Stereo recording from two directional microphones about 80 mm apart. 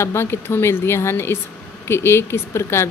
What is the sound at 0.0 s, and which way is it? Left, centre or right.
Speech, left.